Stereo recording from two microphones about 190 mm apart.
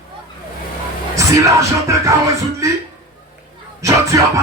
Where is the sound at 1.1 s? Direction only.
15° right (ahead or behind).